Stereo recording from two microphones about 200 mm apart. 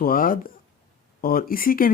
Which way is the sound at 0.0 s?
45° left (ahead or behind).